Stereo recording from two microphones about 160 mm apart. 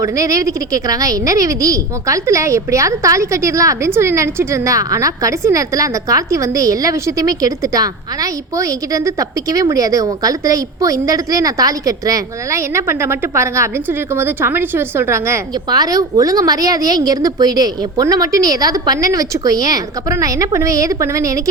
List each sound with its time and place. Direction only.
0.0 s a woman's voice: 20° right (ahead or behind)